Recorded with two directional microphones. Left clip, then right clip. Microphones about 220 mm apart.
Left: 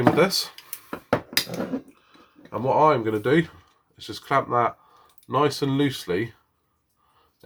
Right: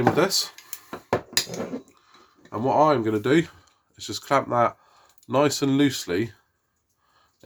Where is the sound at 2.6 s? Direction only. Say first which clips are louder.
Even; 45° right (ahead or behind).